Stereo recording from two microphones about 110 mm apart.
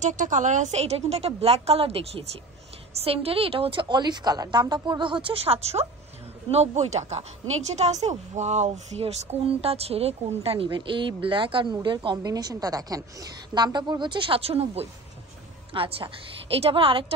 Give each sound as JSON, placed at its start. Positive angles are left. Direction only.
{"t": 0.0, "sound": "a woman's voice", "side_deg": -90}
{"t": 6.5, "sound": "a woman's voice", "side_deg": -85}
{"t": 9.4, "sound": "a woman's voice", "side_deg": -65}
{"t": 12.2, "sound": "a woman's voice", "side_deg": -35}